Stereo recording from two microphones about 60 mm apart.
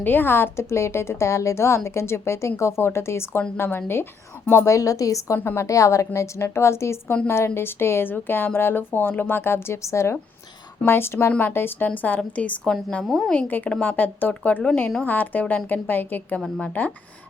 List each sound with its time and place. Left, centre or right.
0.0 s a woman's voice: left
4.6 s a woman's voice: left
10.8 s a woman's voice: left
11.3 s speech: left
12.0 s speech: left
13.0 s a woman's voice: centre
13.3 s speech: left